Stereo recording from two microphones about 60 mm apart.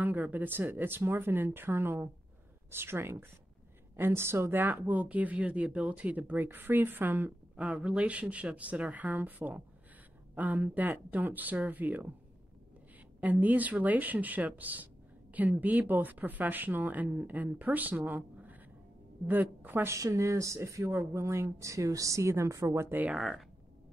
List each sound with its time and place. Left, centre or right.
0.0 s speech: right
7.5 s speech: right
13.2 s speech: right
20.0 s speech: right
23.1 s speech: centre